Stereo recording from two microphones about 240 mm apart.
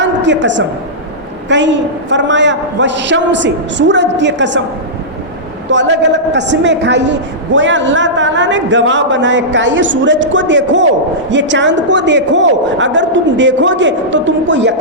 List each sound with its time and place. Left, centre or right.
0.0 s a sound: right
1.5 s a woman's voice: right
5.6 s a woman's voice: right